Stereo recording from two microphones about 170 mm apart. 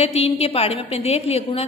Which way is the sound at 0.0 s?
35° left (ahead or behind).